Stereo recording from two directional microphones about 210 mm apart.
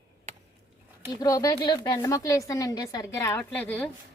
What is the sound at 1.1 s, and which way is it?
Speech, 15° left (ahead or behind).